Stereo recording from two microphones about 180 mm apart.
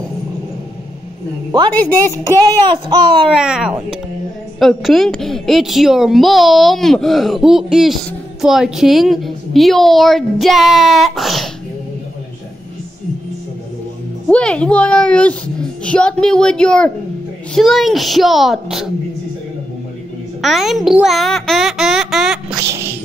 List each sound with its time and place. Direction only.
1.7 s speech: 10° left (ahead or behind)
2.6 s a sound: 25° right (ahead or behind)
3.3 s a woman's voice: 5° right (ahead or behind)
14.3 s a woman's voice: 5° left (ahead or behind)
20.4 s a woman's voice: centre (ahead or behind)